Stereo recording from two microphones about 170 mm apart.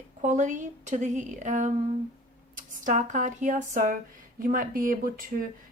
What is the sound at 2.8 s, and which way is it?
A woman's voice, 45° right (ahead or behind).